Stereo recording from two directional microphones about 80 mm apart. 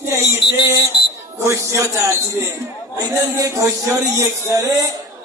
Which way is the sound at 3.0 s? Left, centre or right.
Right.